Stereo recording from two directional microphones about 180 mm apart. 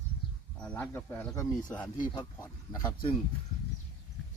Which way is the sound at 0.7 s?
15° left (ahead or behind).